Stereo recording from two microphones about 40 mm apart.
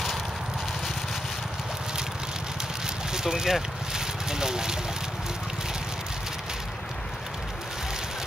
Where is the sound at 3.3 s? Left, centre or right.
Centre.